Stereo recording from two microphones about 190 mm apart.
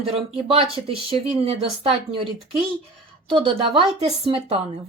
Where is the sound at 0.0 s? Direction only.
30° right (ahead or behind).